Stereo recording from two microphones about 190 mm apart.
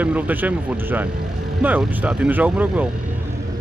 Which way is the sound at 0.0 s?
10° right (ahead or behind).